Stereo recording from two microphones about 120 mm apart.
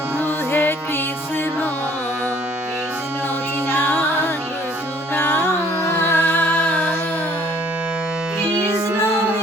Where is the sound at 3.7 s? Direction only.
15° left (ahead or behind).